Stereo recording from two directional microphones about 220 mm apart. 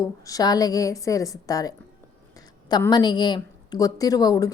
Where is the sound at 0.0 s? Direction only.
15° left (ahead or behind).